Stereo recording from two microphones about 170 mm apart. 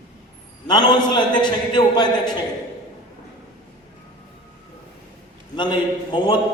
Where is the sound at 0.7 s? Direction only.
25° left (ahead or behind).